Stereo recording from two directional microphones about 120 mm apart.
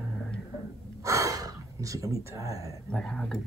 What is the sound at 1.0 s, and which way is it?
Speech, 25° right (ahead or behind).